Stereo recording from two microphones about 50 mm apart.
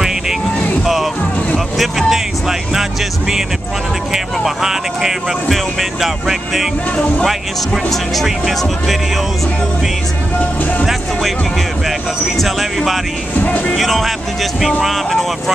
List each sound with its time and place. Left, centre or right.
1.8 s music: centre
4.1 s speech: centre
12.4 s speech: centre
13.4 s speech: left
13.7 s speech: centre